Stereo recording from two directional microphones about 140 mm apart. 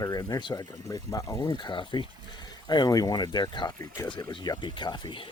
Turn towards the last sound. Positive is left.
turn(degrees=35)  # may be behind; listen again after turning